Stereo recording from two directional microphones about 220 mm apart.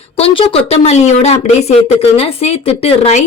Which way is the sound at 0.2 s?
25° left (ahead or behind).